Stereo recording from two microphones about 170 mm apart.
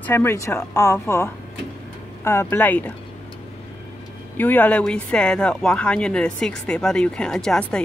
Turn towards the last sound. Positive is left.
turn(degrees=5)  # may be behind; listen again after turning